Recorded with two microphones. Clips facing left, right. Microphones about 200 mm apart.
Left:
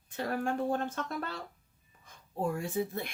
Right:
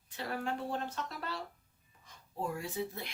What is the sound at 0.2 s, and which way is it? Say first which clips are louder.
Speech: left 5 dB; 50° left (ahead or behind).